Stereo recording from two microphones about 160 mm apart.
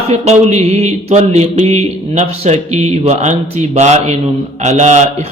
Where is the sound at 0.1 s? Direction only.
45° right (ahead or behind).